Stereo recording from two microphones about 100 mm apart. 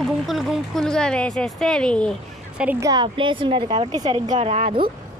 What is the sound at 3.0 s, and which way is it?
A woman's voice, 55° right (ahead or behind).